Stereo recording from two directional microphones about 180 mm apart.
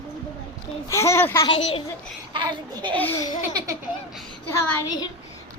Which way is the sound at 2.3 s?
25° right (ahead or behind).